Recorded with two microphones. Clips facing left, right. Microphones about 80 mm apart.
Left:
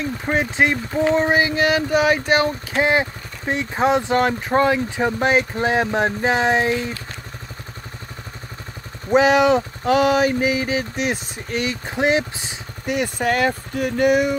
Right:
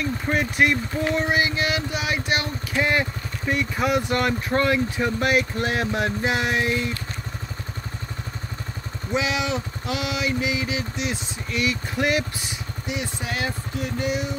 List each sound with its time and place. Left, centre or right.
0.0 s speech: left
1.0 s a sound: left
2.9 s speech: left
9.1 s a sound: left
11.6 s speech: left
12.8 s speech: left